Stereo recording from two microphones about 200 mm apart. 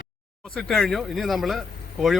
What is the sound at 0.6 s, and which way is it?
Speech, centre (ahead or behind).